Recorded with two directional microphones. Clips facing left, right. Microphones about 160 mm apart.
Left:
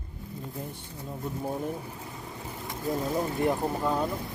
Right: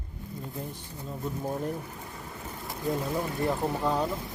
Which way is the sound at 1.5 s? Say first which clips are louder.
Even; 5° left (ahead or behind).